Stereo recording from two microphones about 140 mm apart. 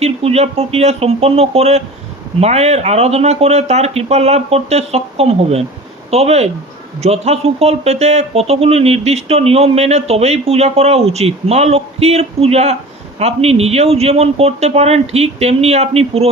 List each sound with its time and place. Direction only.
0.0 s speech: 45° right (ahead or behind)